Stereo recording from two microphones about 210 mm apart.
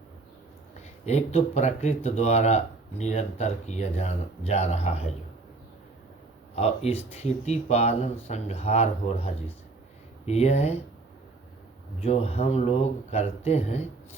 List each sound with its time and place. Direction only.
1.0 s speech: 30° left (ahead or behind)
6.6 s speech: 30° left (ahead or behind)
11.9 s speech: 30° left (ahead or behind)